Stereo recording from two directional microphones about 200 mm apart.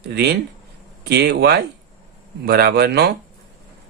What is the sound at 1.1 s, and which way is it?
Speech, 55° right (ahead or behind).